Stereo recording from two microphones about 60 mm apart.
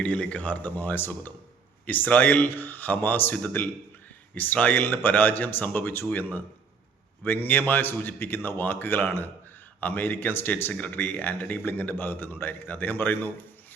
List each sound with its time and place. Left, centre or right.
0.0 s speech: left
7.3 s speech: left